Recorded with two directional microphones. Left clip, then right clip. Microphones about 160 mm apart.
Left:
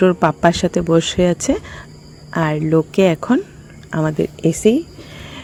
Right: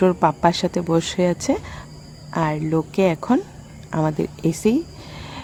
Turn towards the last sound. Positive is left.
turn(degrees=10)  # may be behind; listen again after turning